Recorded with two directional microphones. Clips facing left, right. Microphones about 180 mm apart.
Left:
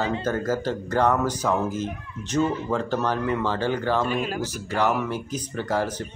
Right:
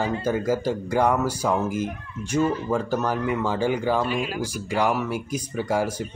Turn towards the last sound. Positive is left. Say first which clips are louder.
# right 1 dB
turn(degrees=-10)  # may be behind; listen again after turning